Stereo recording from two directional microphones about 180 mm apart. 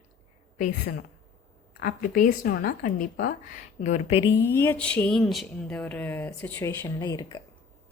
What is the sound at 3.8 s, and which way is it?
Speech, 40° left (ahead or behind).